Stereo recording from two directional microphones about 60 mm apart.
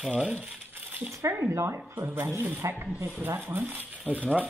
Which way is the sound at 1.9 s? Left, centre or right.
Right.